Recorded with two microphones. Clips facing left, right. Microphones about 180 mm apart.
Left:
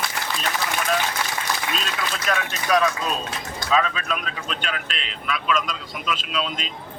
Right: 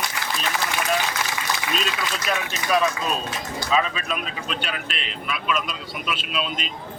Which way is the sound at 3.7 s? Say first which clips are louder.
Left 1 dB; 5° right (ahead or behind).